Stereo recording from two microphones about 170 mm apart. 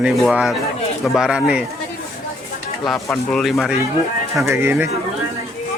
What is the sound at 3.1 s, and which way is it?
Speech, 5° left (ahead or behind).